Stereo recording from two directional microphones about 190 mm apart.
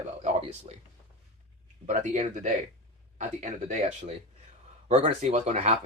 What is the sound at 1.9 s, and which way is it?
Speech, 40° right (ahead or behind).